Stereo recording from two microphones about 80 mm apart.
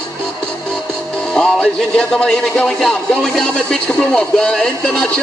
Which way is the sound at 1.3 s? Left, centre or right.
Centre.